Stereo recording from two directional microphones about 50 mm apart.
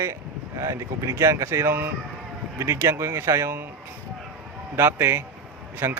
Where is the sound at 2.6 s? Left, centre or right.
Right.